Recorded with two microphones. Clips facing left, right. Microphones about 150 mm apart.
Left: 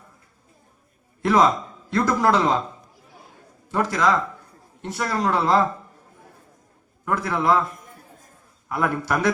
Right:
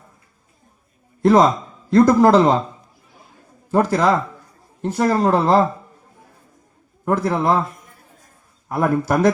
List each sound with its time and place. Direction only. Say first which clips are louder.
1.2 s a man's voice: right 5 dB; 35° right (ahead or behind)
3.7 s speech: right 5 dB; 35° right (ahead or behind)
7.0 s speech: right 4 dB; 35° right (ahead or behind)
8.8 s speech: right 6 dB; 30° right (ahead or behind)